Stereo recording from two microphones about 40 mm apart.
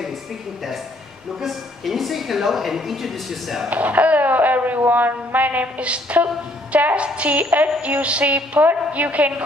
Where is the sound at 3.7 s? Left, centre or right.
Right.